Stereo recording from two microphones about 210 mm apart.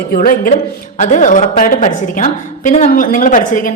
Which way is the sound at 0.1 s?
45° left (ahead or behind).